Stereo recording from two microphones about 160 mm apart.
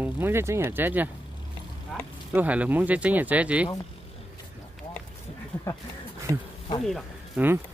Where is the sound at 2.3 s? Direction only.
10° right (ahead or behind).